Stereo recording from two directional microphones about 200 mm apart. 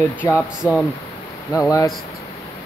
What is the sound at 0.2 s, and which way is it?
Speech, 10° left (ahead or behind).